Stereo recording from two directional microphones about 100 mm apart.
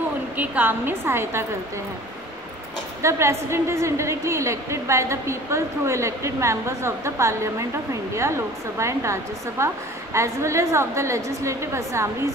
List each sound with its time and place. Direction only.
0.4 s a woman's voice: 20° right (ahead or behind)
3.0 s a woman's voice: 30° right (ahead or behind)